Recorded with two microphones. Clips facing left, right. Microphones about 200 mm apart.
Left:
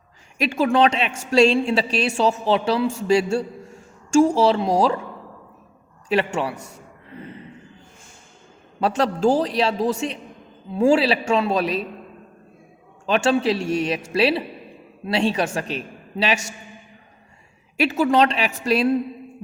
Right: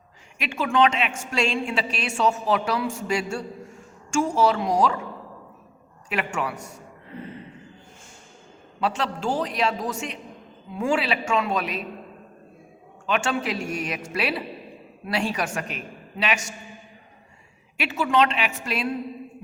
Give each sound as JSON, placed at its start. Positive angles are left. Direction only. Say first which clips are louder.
{"t": 0.3, "sound": "a woman's voice", "louder": "left 4 dB", "side_deg": 40}
{"t": 6.1, "sound": "a woman's voice", "louder": "left 6 dB", "side_deg": 30}
{"t": 8.8, "sound": "a woman's voice", "louder": "left 7 dB", "side_deg": 40}
{"t": 13.1, "sound": "a woman's voice", "louder": "left 6 dB", "side_deg": 30}
{"t": 17.7, "sound": "a woman's voice", "louder": "left 4 dB", "side_deg": 40}